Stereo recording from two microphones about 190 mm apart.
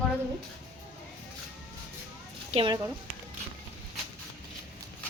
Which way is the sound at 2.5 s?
30° right (ahead or behind).